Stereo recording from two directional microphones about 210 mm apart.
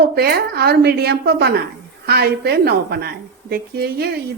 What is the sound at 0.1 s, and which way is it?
A woman's voice, 50° right (ahead or behind).